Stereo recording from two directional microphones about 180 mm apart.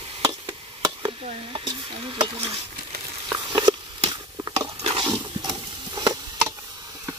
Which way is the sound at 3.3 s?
20° right (ahead or behind).